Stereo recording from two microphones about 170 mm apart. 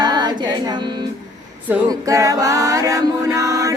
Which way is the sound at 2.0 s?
20° right (ahead or behind).